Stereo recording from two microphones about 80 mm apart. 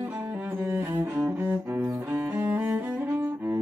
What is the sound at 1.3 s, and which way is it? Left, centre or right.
Cello, right.